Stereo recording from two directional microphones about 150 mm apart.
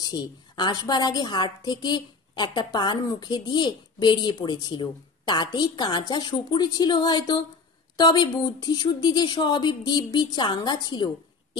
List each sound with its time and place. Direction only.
0.0 s a woman's voice: 25° left (ahead or behind)